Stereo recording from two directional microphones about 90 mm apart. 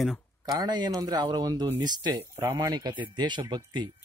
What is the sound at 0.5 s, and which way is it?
Speech, 50° right (ahead or behind).